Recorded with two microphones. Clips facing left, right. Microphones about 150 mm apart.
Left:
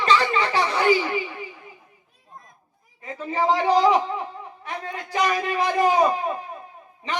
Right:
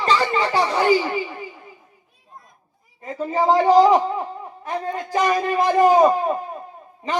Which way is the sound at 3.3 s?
40° right (ahead or behind).